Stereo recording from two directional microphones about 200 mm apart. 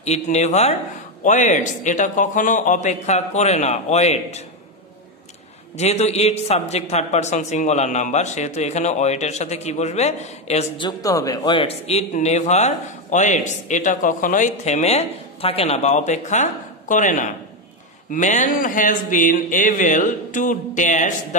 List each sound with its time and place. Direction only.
0.0 s speech: 35° left (ahead or behind)
5.8 s speech: 35° left (ahead or behind)
10.9 s speech: 15° left (ahead or behind); by 21.4 s 35° left (ahead or behind)